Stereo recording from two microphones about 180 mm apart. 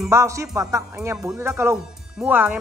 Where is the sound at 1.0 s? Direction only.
5° right (ahead or behind).